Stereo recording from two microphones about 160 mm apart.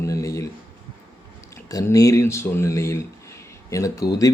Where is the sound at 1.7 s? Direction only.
20° left (ahead or behind).